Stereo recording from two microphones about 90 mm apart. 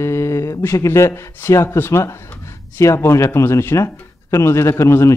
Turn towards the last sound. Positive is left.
turn(degrees=30)  # may be behind; listen again after turning